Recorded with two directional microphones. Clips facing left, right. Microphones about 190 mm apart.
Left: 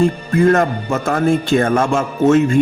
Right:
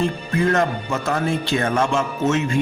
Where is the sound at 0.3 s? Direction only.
50° left (ahead or behind).